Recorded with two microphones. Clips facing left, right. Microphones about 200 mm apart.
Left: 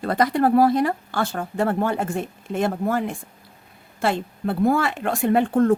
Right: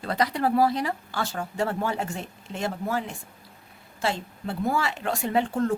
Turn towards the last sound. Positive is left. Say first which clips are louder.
# left 7 dB
turn(degrees=55)  # may be behind; listen again after turning